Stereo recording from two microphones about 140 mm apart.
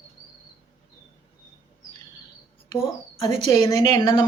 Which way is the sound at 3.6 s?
25° left (ahead or behind).